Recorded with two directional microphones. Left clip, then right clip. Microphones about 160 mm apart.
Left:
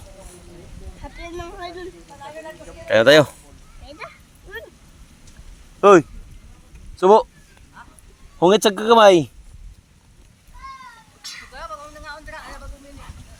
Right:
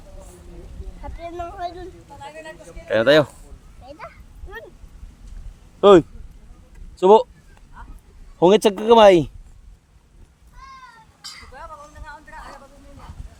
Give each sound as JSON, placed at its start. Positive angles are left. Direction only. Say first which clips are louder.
{"t": 1.2, "sound": "speech", "louder": "right 3 dB", "side_deg": -5}
{"t": 2.8, "sound": "speech", "louder": "left 3 dB", "side_deg": 10}
{"t": 5.8, "sound": "speech", "louder": "even", "side_deg": -20}
{"t": 7.8, "sound": "a sound", "louder": "left 1 dB", "side_deg": -55}
{"t": 8.4, "sound": "speech", "louder": "even", "side_deg": -25}
{"t": 11.5, "sound": "a sound", "louder": "left 4 dB", "side_deg": -70}